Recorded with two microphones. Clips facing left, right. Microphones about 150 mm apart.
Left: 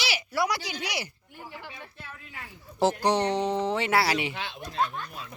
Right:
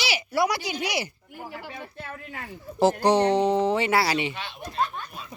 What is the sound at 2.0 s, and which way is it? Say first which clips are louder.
Speech: right 7 dB; 50° right (ahead or behind).